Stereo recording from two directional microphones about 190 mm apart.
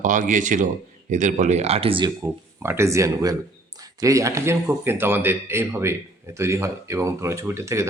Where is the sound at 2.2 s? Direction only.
15° right (ahead or behind).